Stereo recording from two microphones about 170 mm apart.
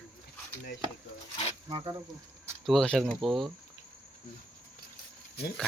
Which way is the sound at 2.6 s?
Centre (ahead or behind).